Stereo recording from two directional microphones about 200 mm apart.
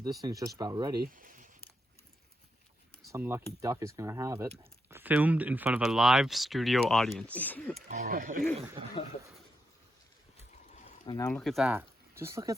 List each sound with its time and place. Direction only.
0.2 s speech: 20° right (ahead or behind)
1.0 s speech: 45° right (ahead or behind)
3.1 s speech: 10° right (ahead or behind); by 7.9 s 5° left (ahead or behind)
7.9 s speech: 40° right (ahead or behind)
11.0 s speech: 20° left (ahead or behind)
11.3 s speech: 5° left (ahead or behind); by 12.5 s 15° right (ahead or behind)